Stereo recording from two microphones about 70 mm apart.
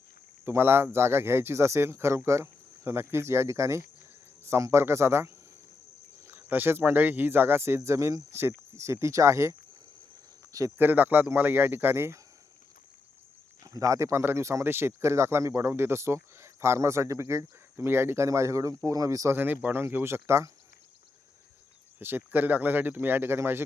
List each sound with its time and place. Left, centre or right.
0.4 s speech: right
7.9 s speech: right
10.8 s speech: right
13.7 s speech: right
18.3 s speech: right
19.3 s speech: right
21.9 s speech: right